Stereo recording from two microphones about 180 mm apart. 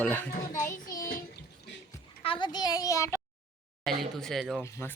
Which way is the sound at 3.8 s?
Centre (ahead or behind).